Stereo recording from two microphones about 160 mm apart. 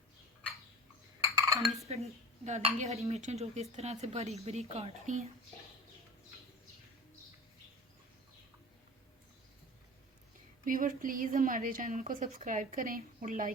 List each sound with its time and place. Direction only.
1.2 s cutlery: 20° right (ahead or behind)
1.9 s speech: 45° right (ahead or behind)
10.7 s a woman's voice: 55° right (ahead or behind)